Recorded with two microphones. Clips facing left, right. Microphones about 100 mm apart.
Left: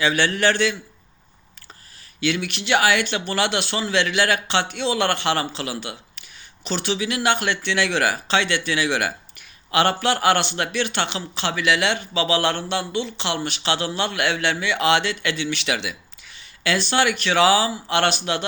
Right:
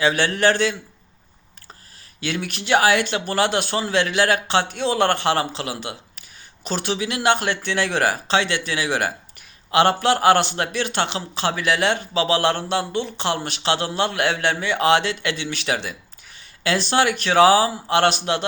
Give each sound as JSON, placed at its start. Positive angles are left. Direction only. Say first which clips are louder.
{"t": 0.0, "sound": "speech", "louder": "right 1 dB", "side_deg": -45}
{"t": 2.2, "sound": "speech", "louder": "left 3 dB", "side_deg": -45}